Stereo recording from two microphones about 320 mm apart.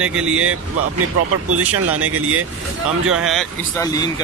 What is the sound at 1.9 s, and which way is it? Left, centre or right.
Speech, right.